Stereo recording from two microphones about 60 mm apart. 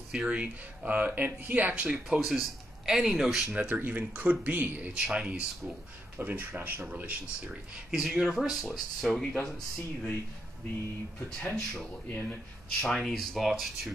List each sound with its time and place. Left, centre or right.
0.1 s speech: centre
1.9 s speech: centre
3.5 s speech: right
4.9 s speech: centre
6.1 s speech: right
7.7 s speech: centre
11.2 s speech: centre
12.1 s speech: left
12.8 s speech: centre